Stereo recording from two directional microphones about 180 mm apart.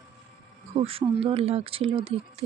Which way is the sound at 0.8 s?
30° right (ahead or behind).